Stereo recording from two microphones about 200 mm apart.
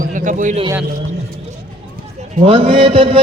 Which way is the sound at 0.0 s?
40° right (ahead or behind).